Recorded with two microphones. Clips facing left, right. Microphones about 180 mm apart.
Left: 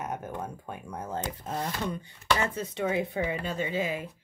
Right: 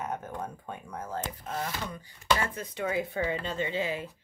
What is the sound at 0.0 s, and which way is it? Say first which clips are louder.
Speech: even; 10° left (ahead or behind).